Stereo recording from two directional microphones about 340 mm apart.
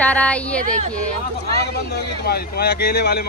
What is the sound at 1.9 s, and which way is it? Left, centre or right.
A man's voice, left.